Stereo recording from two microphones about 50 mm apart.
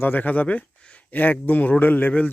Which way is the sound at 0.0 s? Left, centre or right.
Left.